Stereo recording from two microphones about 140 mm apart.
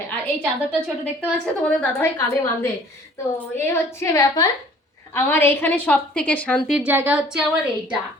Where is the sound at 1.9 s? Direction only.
20° left (ahead or behind).